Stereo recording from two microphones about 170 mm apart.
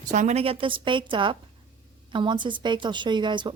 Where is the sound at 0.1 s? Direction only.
45° right (ahead or behind).